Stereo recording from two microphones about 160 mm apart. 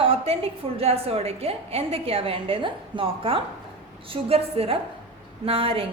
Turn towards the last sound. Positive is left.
turn(degrees=-35)  # may be behind; listen again after turning